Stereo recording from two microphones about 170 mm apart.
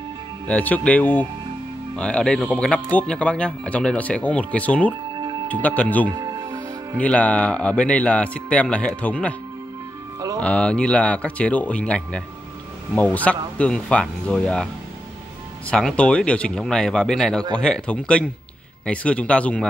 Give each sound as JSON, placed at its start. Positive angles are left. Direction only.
{"t": 0.5, "sound": "speech", "side_deg": 10}
{"t": 5.1, "sound": "music", "side_deg": -25}
{"t": 5.5, "sound": "speech", "side_deg": 10}
{"t": 6.0, "sound": "music", "side_deg": -25}
{"t": 7.0, "sound": "speech", "side_deg": 10}
{"t": 10.4, "sound": "speech", "side_deg": 5}
{"t": 15.7, "sound": "speech", "side_deg": 5}